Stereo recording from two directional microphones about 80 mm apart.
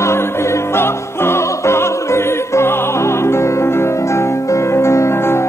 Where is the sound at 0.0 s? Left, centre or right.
Left.